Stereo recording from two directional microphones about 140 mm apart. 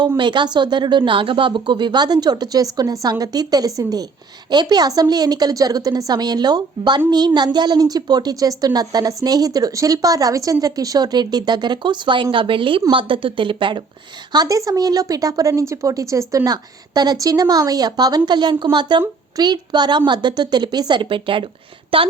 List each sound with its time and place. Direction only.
0.2 s a woman's voice: 35° right (ahead or behind)
14.3 s a woman's voice: 25° right (ahead or behind); by 22.1 s 40° right (ahead or behind)